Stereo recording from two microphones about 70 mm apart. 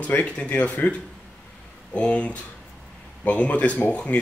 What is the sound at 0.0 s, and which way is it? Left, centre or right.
Speech, left.